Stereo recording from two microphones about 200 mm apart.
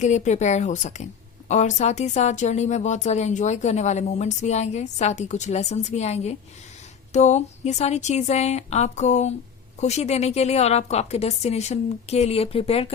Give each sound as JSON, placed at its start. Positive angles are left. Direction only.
{"t": 0.0, "sound": "speech", "side_deg": 35}